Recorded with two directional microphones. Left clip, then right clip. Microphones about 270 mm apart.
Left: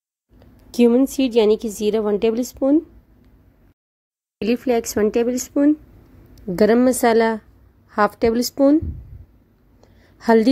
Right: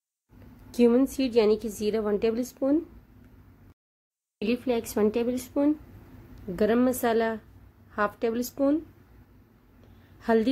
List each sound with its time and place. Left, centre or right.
0.7 s a woman's voice: left
4.4 s a woman's voice: centre
6.5 s a woman's voice: left
10.1 s a woman's voice: left